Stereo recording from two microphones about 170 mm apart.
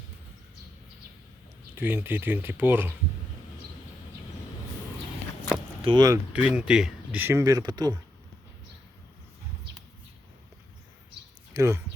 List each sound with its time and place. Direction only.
1.7 s speech: 10° right (ahead or behind)
5.8 s speech: 25° right (ahead or behind)
6.3 s speech: 5° right (ahead or behind); by 7.9 s 25° right (ahead or behind)
11.5 s speech: 15° right (ahead or behind)